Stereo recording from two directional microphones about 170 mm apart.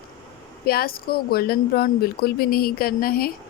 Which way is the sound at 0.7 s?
60° left (ahead or behind).